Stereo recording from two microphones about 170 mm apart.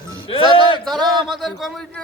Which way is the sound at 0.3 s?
30° left (ahead or behind).